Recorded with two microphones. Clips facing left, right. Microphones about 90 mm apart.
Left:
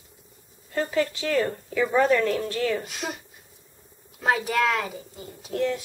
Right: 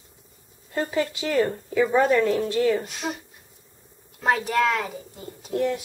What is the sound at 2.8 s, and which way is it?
Speech, centre (ahead or behind).